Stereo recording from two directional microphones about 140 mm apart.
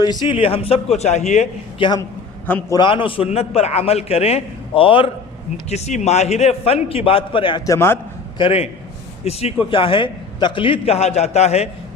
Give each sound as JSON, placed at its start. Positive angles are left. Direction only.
{"t": 0.0, "sound": "a man's voice", "side_deg": 30}
{"t": 1.8, "sound": "a man's voice", "side_deg": 35}
{"t": 5.6, "sound": "a man's voice", "side_deg": 55}
{"t": 7.6, "sound": "a man's voice", "side_deg": 20}
{"t": 8.4, "sound": "a man's voice", "side_deg": 45}